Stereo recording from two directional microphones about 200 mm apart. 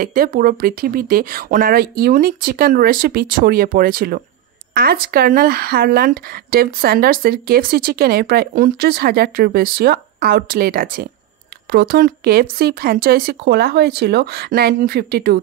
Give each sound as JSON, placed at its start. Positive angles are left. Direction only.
{"t": 0.0, "sound": "speech", "side_deg": -45}